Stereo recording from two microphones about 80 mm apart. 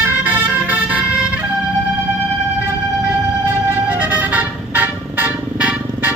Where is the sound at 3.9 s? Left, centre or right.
Right.